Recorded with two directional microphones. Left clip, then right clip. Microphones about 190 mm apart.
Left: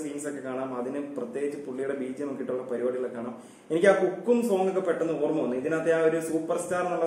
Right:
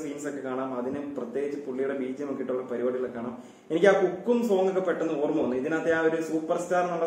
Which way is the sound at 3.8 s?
15° left (ahead or behind).